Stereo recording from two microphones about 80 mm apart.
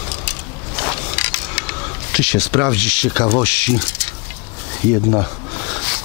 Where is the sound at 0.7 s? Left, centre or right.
Centre.